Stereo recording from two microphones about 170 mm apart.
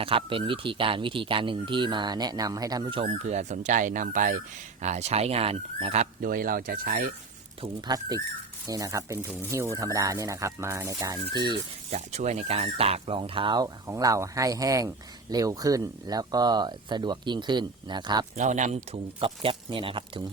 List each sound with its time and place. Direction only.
0.0 s speech: 30° right (ahead or behind)
3.2 s speech: 45° right (ahead or behind)
6.2 s speech: 55° right (ahead or behind)
7.6 s speech: 25° right (ahead or behind)
11.9 s speech: 40° right (ahead or behind); by 18.3 s 25° right (ahead or behind)
18.3 s speech: 45° right (ahead or behind); by 20.2 s 30° right (ahead or behind)